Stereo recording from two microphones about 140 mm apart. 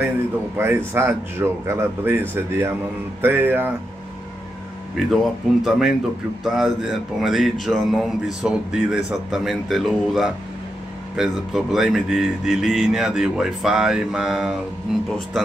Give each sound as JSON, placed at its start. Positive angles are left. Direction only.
{"t": 0.6, "sound": "speech", "side_deg": -15}
{"t": 4.9, "sound": "speech", "side_deg": 0}